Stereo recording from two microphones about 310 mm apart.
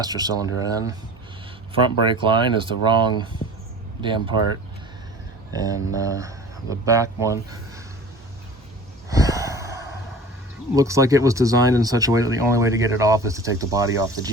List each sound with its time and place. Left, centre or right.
0.0 s speech: centre
5.5 s speech: centre
9.0 s gasp: centre
10.8 s speech: centre